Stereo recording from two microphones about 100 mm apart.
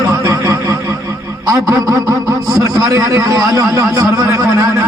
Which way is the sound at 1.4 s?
35° right (ahead or behind).